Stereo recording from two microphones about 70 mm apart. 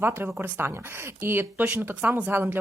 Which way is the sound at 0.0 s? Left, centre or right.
Right.